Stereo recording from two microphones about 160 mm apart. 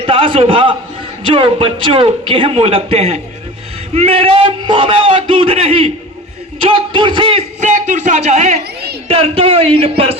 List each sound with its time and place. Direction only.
0.0 s a man's voice: 35° right (ahead or behind)
7.6 s a man's voice: 50° right (ahead or behind)